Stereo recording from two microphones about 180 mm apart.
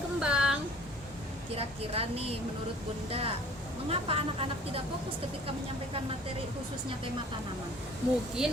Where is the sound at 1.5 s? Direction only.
35° right (ahead or behind).